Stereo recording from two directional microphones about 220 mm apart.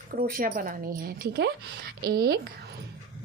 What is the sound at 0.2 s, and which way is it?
Speech, 40° right (ahead or behind).